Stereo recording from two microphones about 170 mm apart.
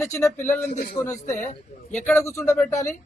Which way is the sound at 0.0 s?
15° left (ahead or behind).